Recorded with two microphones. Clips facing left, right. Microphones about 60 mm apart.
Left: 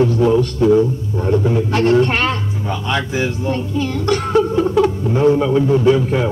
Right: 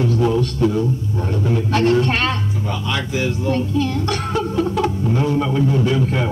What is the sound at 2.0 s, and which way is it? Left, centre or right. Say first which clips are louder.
Speech: left 3 dB; left.